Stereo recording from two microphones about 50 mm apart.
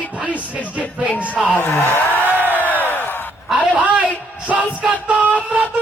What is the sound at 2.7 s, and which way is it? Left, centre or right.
Crowd, left.